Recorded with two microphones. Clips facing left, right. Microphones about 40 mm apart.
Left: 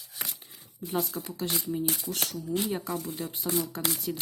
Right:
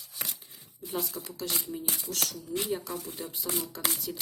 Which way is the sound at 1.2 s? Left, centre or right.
Left.